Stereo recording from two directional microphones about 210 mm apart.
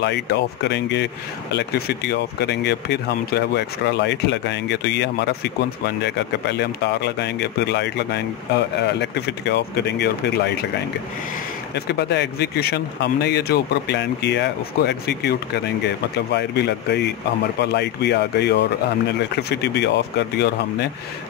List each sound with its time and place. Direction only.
0.0 s speech: 55° left (ahead or behind)
11.7 s speech: 55° left (ahead or behind)